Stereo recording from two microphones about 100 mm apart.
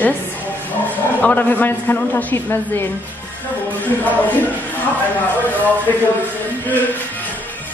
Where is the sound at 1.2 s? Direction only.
15° left (ahead or behind).